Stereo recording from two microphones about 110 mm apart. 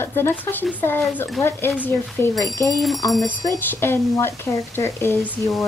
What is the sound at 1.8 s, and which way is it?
Speech, 20° left (ahead or behind).